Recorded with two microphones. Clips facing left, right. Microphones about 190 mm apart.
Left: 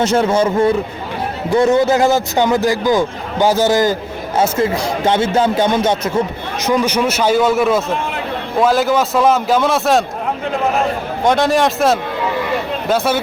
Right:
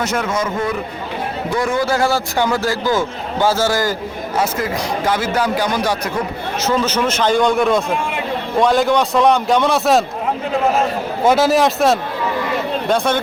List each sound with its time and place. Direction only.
0.0 s a man's voice: 30° left (ahead or behind); by 10.0 s centre (ahead or behind)
11.2 s a man's voice: 5° right (ahead or behind)